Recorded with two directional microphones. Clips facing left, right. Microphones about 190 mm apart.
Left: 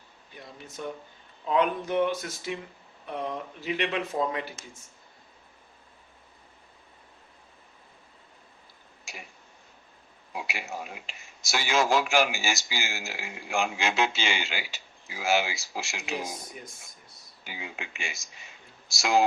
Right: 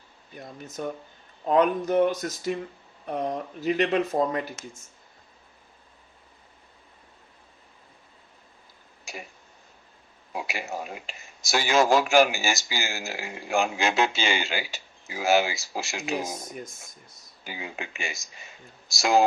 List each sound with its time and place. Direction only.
0.3 s speech: 45° right (ahead or behind)
10.4 s a sound: 40° right (ahead or behind)
11.5 s speech: 40° right (ahead or behind)
17.4 s speech: 40° right (ahead or behind)